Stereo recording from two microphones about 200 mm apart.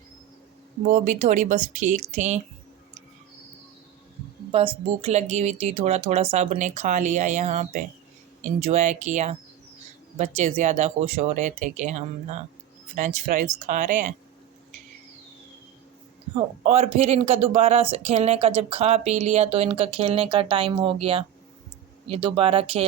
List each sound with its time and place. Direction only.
0.9 s speech: 40° right (ahead or behind)
4.5 s speech: 30° right (ahead or behind)
16.6 s speech: 30° right (ahead or behind)